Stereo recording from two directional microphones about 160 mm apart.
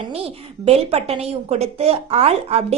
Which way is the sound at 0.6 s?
40° right (ahead or behind).